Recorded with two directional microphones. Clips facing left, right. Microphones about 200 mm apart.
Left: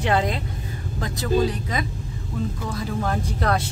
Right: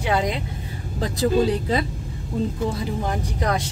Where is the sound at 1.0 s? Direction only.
30° right (ahead or behind).